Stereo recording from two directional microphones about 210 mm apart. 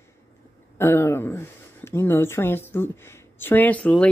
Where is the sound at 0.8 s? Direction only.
10° left (ahead or behind).